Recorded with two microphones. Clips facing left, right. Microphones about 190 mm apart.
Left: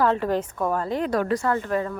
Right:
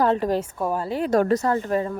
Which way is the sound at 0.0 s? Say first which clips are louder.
Right 1 dB; 15° right (ahead or behind).